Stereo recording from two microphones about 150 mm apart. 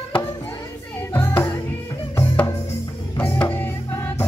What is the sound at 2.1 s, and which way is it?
Music, 15° left (ahead or behind).